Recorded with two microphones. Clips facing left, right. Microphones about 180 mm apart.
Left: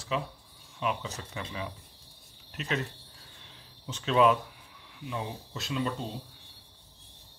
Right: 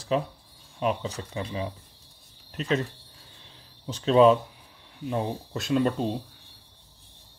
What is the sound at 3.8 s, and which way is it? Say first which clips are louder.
Speech: right 6 dB; 35° right (ahead or behind).